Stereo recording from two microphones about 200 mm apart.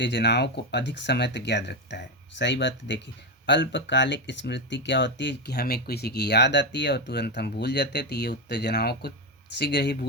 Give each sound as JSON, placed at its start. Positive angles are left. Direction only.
{"t": 0.0, "sound": "speech", "side_deg": 60}